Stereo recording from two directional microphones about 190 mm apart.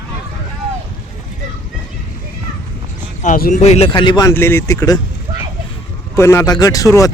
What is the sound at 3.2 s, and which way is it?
Speech, 45° left (ahead or behind).